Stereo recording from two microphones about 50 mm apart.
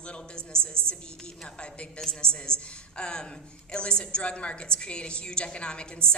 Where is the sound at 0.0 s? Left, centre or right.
Centre.